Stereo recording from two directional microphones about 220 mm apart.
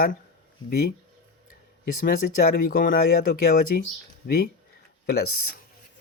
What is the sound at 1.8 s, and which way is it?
Speech, 40° left (ahead or behind).